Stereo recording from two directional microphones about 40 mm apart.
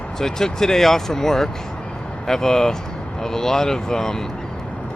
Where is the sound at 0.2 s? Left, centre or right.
Centre.